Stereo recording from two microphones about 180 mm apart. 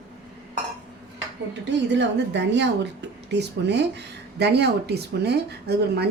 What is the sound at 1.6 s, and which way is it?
A woman's voice, 75° right (ahead or behind).